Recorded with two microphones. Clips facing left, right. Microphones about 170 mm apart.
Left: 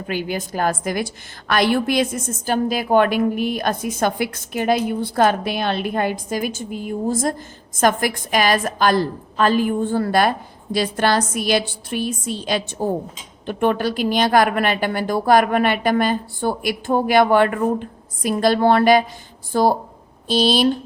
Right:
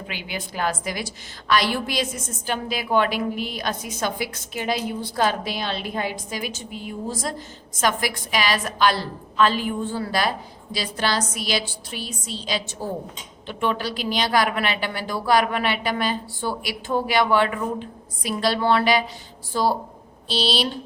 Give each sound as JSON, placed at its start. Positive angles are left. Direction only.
{"t": 0.1, "sound": "a woman's voice", "side_deg": 45}